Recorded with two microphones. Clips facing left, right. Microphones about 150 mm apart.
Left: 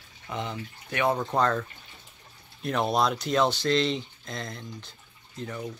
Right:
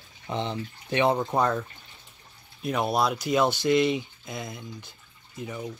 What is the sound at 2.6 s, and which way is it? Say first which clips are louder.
Speech: even; 5° right (ahead or behind).